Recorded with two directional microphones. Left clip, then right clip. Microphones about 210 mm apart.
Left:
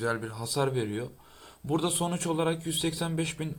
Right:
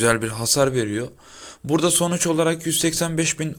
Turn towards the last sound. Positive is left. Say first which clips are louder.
# right 10 dB
turn(degrees=-25)  # may be behind; listen again after turning